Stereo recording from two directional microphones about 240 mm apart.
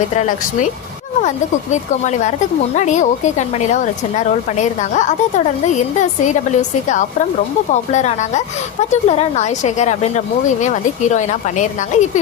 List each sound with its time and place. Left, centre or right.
1.7 s a woman's voice: left